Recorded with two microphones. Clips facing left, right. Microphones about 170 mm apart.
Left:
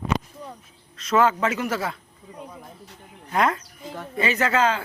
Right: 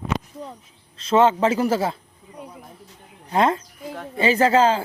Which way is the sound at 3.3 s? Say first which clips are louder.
Right 3 dB; 25° right (ahead or behind).